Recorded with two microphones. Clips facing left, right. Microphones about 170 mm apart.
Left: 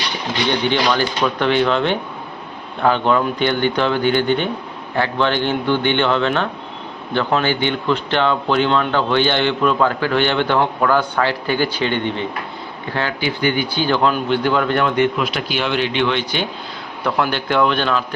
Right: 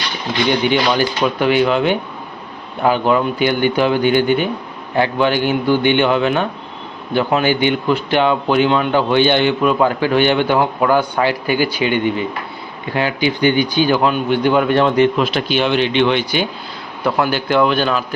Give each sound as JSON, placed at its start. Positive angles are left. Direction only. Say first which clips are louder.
{"t": 0.6, "sound": "speech", "louder": "right 2 dB", "side_deg": -10}
{"t": 14.8, "sound": "a man's voice", "louder": "right 4 dB", "side_deg": -30}